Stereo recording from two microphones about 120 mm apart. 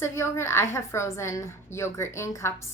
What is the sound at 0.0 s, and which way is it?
A woman's voice, 20° left (ahead or behind).